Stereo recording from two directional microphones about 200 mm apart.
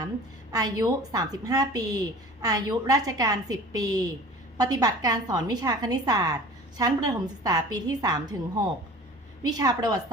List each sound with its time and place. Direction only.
0.5 s a woman's voice: 20° right (ahead or behind)
9.6 s a woman's voice: 20° right (ahead or behind)